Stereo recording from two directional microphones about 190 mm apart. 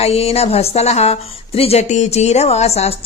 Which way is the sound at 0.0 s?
30° left (ahead or behind).